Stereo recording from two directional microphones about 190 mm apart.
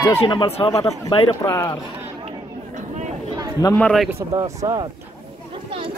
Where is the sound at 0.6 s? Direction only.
15° left (ahead or behind).